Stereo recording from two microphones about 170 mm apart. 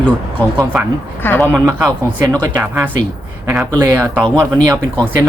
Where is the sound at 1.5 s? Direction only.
10° right (ahead or behind).